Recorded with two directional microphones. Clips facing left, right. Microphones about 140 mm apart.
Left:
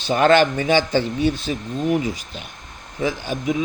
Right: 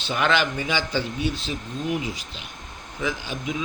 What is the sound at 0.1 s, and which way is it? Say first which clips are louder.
Speech: left 8 dB; 45° left (ahead or behind).